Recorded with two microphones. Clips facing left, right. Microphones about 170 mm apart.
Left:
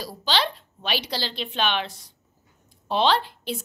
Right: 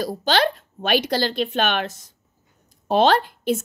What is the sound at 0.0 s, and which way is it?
A woman's voice, 50° right (ahead or behind).